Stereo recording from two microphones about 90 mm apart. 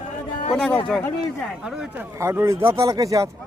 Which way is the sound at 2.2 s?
35° right (ahead or behind).